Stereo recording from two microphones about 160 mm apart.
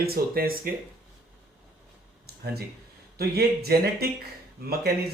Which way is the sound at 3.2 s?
80° right.